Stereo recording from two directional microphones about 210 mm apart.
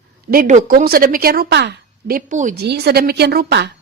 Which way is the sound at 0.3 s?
40° right (ahead or behind).